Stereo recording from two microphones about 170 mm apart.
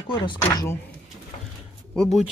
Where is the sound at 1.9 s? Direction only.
Centre (ahead or behind).